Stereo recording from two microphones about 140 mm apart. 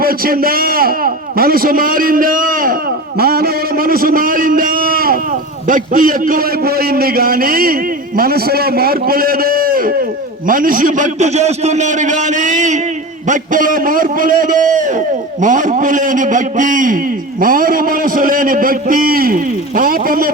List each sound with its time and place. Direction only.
0.0 s a man's voice: 90° right
3.2 s a man's voice: 90° right
5.6 s a man's voice: 75° right (ahead or behind)
17.4 s a man's voice: 85° right